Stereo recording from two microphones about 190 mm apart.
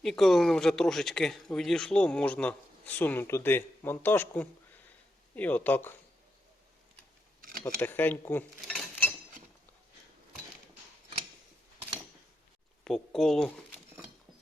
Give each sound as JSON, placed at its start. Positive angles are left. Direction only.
{"t": 0.0, "sound": "speech", "side_deg": 0}
{"t": 7.4, "sound": "a sound", "side_deg": -50}
{"t": 7.8, "sound": "speech", "side_deg": 10}
{"t": 12.8, "sound": "speech", "side_deg": 0}